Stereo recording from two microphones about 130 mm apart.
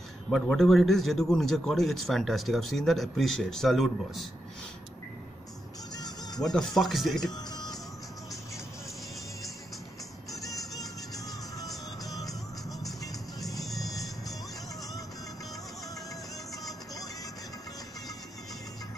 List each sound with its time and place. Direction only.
0.3 s a man's voice: centre (ahead or behind)
5.9 s music: 30° left (ahead or behind)
6.4 s a man's voice: 5° left (ahead or behind)
7.3 s music: 30° left (ahead or behind)
10.7 s music: 25° left (ahead or behind)
13.6 s music: centre (ahead or behind)
16.6 s music: 30° left (ahead or behind)